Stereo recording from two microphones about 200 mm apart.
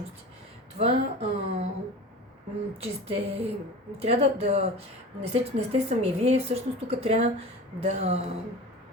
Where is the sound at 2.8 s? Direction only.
30° right (ahead or behind).